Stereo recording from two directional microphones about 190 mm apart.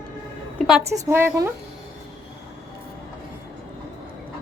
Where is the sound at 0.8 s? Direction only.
15° right (ahead or behind).